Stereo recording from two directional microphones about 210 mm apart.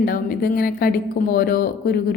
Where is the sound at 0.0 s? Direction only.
45° left (ahead or behind).